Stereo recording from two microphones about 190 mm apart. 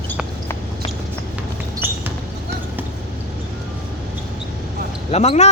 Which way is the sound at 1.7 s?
10° right (ahead or behind).